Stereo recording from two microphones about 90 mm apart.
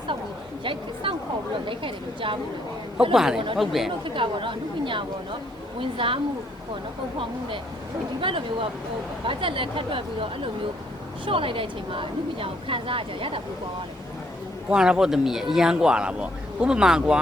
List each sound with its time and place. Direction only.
0.6 s a sound: 70° right (ahead or behind)
1.6 s speech: 70° right (ahead or behind)
3.1 s a man's voice: 5° right (ahead or behind)
4.0 s speech: 70° right (ahead or behind)
8.2 s speech: 70° right (ahead or behind)
14.7 s speech: 10° right (ahead or behind)